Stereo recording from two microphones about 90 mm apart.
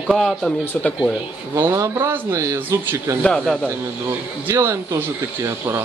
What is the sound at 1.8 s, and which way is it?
Speech, 25° right (ahead or behind).